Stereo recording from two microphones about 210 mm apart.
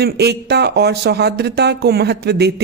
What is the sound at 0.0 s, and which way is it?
A woman's voice, 50° right (ahead or behind).